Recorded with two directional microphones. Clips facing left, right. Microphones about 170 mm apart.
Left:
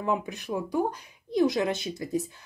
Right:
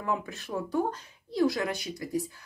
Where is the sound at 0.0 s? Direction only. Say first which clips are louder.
Left 3 dB; 20° left (ahead or behind).